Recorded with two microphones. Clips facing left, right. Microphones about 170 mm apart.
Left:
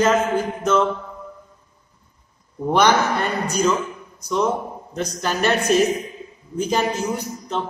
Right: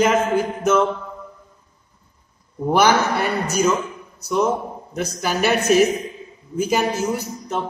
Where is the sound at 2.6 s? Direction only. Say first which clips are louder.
Right 1 dB; 5° right (ahead or behind).